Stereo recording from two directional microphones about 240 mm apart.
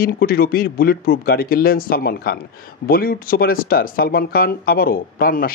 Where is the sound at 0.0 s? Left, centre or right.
Left.